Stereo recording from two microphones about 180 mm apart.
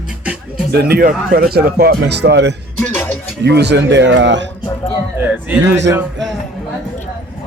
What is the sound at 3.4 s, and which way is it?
Speech, 70° right (ahead or behind).